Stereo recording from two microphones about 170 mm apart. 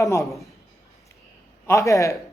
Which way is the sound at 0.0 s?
20° left (ahead or behind).